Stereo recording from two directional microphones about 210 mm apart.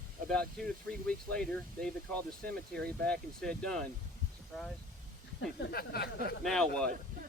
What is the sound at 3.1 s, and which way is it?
Speech, 5° left (ahead or behind).